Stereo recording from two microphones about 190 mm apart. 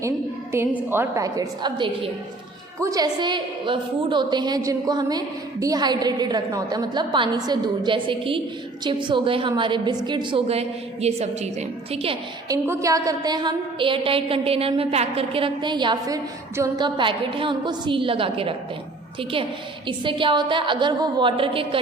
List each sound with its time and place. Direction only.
0.9 s a woman's voice: 15° right (ahead or behind); by 11.4 s 35° right (ahead or behind)
12.5 s a woman's voice: 15° right (ahead or behind)
19.9 s a woman's voice: 25° right (ahead or behind)